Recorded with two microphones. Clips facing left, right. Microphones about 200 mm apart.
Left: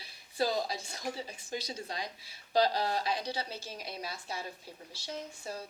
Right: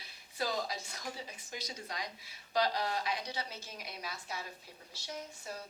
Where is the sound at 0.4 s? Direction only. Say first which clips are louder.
Left 5 dB; 30° left (ahead or behind).